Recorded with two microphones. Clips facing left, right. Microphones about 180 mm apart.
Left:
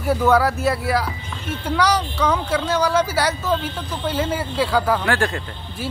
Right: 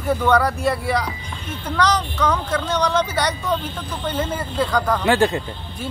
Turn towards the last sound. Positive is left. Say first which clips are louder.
# right 4 dB
turn(degrees=-20)  # may be behind; listen again after turning